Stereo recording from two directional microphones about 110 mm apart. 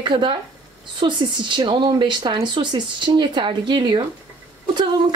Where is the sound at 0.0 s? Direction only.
45° right (ahead or behind).